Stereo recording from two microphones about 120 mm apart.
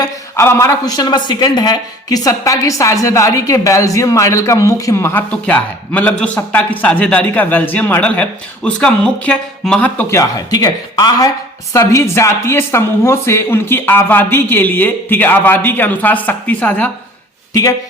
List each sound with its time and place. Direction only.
0.0 s speech: 25° left (ahead or behind)
5.3 s speech: 10° left (ahead or behind)
10.2 s speech: 30° left (ahead or behind); by 16.9 s 15° left (ahead or behind)
17.5 s speech: 30° left (ahead or behind)